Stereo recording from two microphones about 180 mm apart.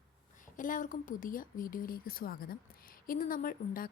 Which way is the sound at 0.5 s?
45° left (ahead or behind).